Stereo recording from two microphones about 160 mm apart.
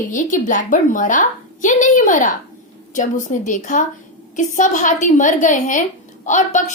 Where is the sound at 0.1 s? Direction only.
55° left (ahead or behind).